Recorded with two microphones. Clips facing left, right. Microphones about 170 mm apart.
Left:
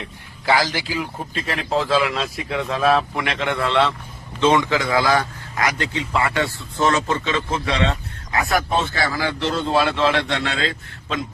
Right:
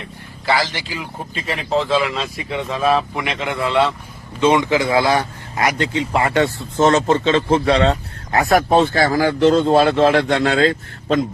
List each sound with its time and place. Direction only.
0.4 s a man's voice: 10° left (ahead or behind)
4.4 s speech: 15° right (ahead or behind); by 6.3 s 35° right (ahead or behind)
6.3 s speech: 20° right (ahead or behind); by 8.6 s 35° right (ahead or behind)
8.7 s a man's voice: 55° right (ahead or behind)